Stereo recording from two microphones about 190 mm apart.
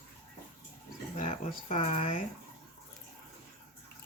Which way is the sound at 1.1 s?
35° left (ahead or behind).